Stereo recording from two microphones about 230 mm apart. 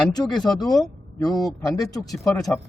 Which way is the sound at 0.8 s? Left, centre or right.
Centre.